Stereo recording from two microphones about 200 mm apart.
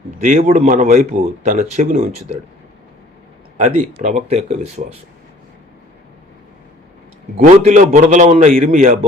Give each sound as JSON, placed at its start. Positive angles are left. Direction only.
{"t": 0.3, "sound": "a man's voice", "side_deg": -35}
{"t": 3.6, "sound": "a man's voice", "side_deg": -40}
{"t": 7.3, "sound": "a man's voice", "side_deg": -35}